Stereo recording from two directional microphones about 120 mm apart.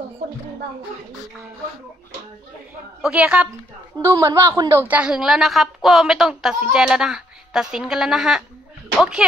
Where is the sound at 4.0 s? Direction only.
25° right (ahead or behind).